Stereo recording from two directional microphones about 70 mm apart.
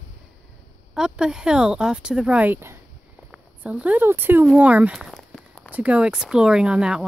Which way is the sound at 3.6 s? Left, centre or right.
Right.